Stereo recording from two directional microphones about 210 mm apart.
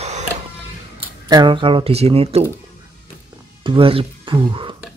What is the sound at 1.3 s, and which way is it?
Speech, 20° right (ahead or behind).